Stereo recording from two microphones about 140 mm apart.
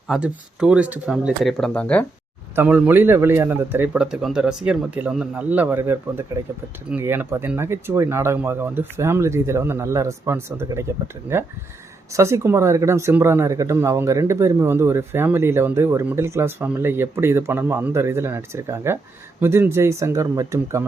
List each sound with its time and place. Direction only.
0.1 s speech: 5° right (ahead or behind)
1.6 s speech: 10° left (ahead or behind)
2.6 s speech: 10° right (ahead or behind)